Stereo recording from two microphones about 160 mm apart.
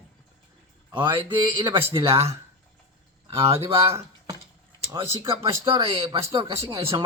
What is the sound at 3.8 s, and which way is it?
Speech, 15° right (ahead or behind).